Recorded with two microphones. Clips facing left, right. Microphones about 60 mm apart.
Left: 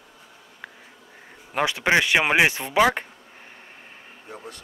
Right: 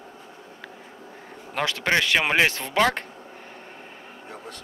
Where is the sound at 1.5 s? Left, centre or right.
Centre.